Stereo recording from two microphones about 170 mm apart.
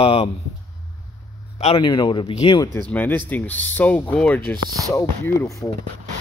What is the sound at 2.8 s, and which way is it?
Speech, 10° left (ahead or behind).